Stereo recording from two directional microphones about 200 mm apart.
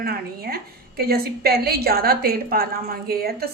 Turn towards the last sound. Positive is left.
turn(degrees=-50)  # may be behind; listen again after turning